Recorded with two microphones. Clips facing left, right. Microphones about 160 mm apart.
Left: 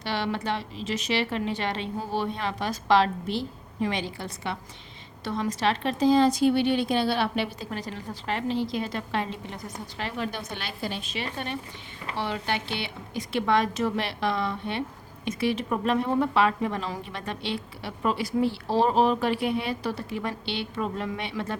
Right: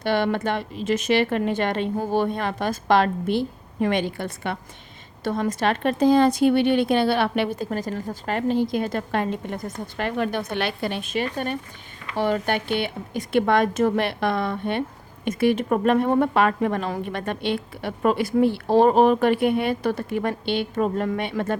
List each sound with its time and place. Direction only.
0.0 s a woman's voice: 50° right (ahead or behind)